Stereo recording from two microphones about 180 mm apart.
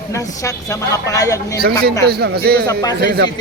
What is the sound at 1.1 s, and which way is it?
Speech, 20° left (ahead or behind).